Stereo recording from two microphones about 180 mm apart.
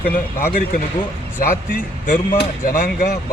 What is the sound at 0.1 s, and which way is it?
Speech, 50° left (ahead or behind).